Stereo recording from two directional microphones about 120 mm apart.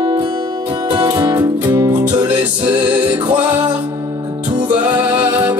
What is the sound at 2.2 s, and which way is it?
Music, 15° right (ahead or behind).